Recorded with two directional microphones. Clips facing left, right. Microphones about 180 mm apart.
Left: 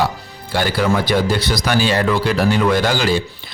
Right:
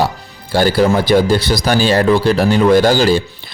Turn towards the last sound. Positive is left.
turn(degrees=-35)  # may be behind; listen again after turning